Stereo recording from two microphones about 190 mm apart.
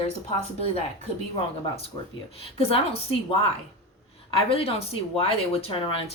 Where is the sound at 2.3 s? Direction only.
30° left (ahead or behind).